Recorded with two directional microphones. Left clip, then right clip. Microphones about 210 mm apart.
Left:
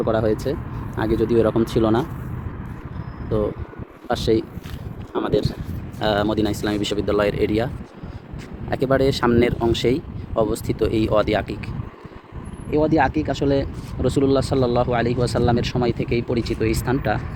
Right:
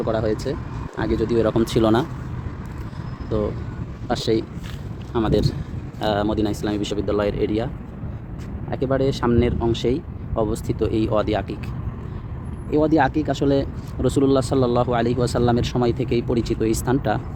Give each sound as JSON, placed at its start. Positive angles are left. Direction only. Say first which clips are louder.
{"t": 0.0, "sound": "speech", "louder": "left 2 dB", "side_deg": 10}
{"t": 1.5, "sound": "speech", "louder": "right 1 dB", "side_deg": -5}
{"t": 3.3, "sound": "speech", "louder": "left 2 dB", "side_deg": 5}
{"t": 5.1, "sound": "speech", "louder": "even", "side_deg": -5}
{"t": 8.7, "sound": "speech", "louder": "left 3 dB", "side_deg": 5}
{"t": 12.7, "sound": "speech", "louder": "even", "side_deg": -20}